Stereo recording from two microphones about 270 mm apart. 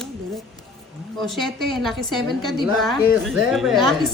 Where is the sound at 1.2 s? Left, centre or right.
Centre.